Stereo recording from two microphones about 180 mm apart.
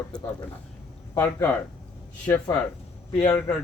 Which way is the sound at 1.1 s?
10° left (ahead or behind).